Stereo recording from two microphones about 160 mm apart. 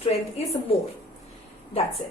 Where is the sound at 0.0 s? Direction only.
40° left (ahead or behind).